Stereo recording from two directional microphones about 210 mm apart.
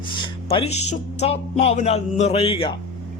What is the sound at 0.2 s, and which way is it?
Speech, 25° left (ahead or behind).